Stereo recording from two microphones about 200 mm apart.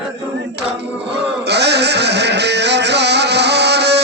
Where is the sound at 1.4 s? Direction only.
55° right (ahead or behind).